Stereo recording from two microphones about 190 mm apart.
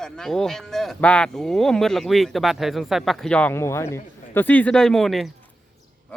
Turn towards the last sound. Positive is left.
turn(degrees=0)  # may be behind; listen again after turning